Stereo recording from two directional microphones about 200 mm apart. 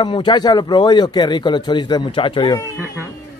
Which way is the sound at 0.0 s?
25° left (ahead or behind).